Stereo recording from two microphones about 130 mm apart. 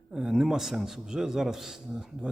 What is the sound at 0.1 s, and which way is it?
A man's voice, 5° right (ahead or behind).